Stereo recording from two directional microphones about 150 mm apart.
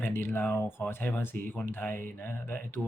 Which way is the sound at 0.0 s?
15° left (ahead or behind).